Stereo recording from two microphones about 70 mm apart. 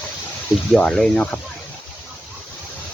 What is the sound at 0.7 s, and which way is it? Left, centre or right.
Speech, centre.